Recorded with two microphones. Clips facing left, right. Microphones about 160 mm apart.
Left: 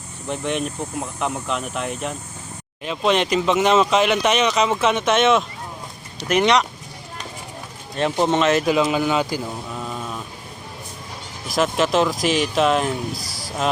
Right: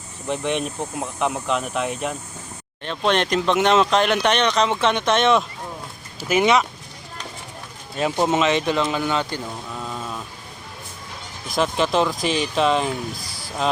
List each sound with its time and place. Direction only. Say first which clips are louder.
0.3 s speech: right 1 dB; centre (ahead or behind)
7.9 s speech: left 1 dB; 5° right (ahead or behind)
11.4 s speech: left 1 dB; centre (ahead or behind)
13.1 s a sound: left 3 dB; 90° left